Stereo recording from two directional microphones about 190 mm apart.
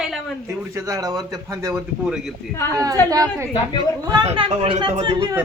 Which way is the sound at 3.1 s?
15° right (ahead or behind).